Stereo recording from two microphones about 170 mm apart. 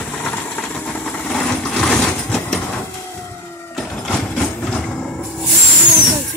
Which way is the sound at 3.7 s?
5° left (ahead or behind).